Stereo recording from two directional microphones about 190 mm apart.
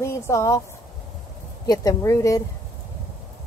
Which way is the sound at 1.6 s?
20° left (ahead or behind).